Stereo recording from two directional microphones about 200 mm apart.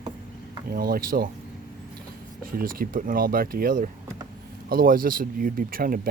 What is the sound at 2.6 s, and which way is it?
Speech, 45° right (ahead or behind).